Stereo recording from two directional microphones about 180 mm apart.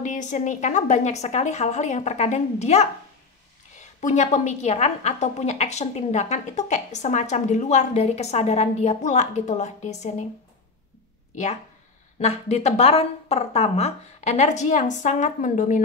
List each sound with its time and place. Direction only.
0.0 s a woman's voice: 40° left (ahead or behind)
4.0 s a woman's voice: 40° left (ahead or behind)
12.2 s a woman's voice: 35° left (ahead or behind)